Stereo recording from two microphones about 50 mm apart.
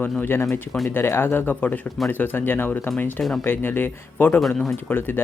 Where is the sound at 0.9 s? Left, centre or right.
Left.